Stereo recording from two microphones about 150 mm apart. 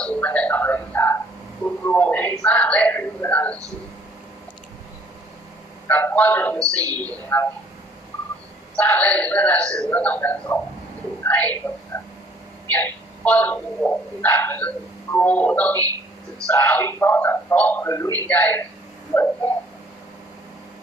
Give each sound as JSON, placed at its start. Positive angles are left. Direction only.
{"t": 0.0, "sound": "a sound", "side_deg": 10}
{"t": 5.9, "sound": "speech", "side_deg": 10}
{"t": 6.8, "sound": "speech", "side_deg": -25}
{"t": 7.3, "sound": "speech", "side_deg": 10}
{"t": 8.8, "sound": "speech", "side_deg": 10}
{"t": 11.9, "sound": "a sound", "side_deg": 20}
{"t": 12.7, "sound": "speech", "side_deg": 10}
{"t": 17.8, "sound": "a man's voice", "side_deg": 20}